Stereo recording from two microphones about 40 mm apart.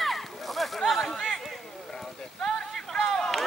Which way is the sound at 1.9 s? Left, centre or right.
Centre.